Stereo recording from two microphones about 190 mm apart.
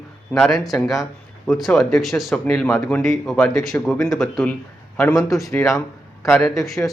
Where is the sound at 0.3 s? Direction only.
Centre (ahead or behind).